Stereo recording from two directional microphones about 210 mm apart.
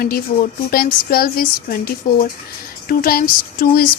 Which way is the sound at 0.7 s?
45° left (ahead or behind).